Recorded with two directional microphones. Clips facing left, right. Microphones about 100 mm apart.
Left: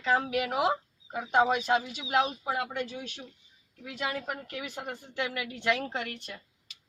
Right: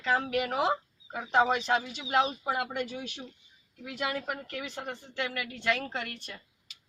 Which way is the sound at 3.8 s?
Centre (ahead or behind).